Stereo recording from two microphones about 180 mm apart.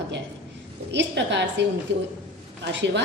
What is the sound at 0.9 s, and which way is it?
Speech, 75° right (ahead or behind).